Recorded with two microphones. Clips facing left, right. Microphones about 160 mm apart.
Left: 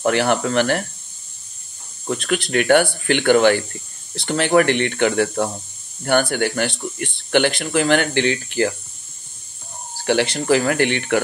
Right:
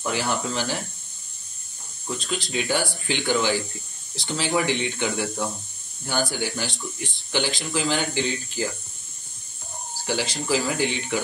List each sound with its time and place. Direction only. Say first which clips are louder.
0.0 s speech: left 8 dB; 70° left (ahead or behind)
2.0 s speech: left 8 dB; 65° left (ahead or behind)
10.0 s speech: left 9 dB; 65° left (ahead or behind)